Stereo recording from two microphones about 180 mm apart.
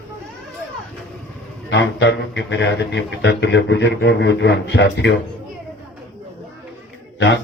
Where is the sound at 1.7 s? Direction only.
80° left.